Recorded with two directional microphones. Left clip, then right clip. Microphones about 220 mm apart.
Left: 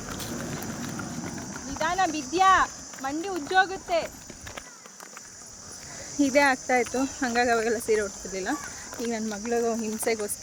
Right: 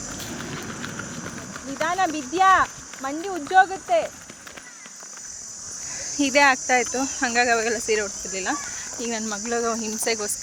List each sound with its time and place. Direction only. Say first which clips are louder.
1.8 s speech: right 2 dB; 45° right (ahead or behind)
6.0 s speech: right 4 dB; 5° left (ahead or behind)